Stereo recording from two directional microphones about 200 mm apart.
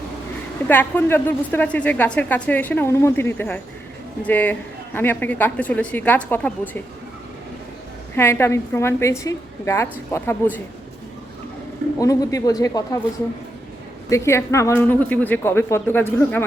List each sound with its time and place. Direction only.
0.7 s a woman's voice: 10° left (ahead or behind)
8.1 s a woman's voice: 10° left (ahead or behind)
11.9 s a woman's voice: 15° left (ahead or behind)
14.1 s a woman's voice: 15° left (ahead or behind)